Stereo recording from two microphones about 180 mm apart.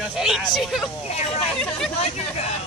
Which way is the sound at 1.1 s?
35° left (ahead or behind).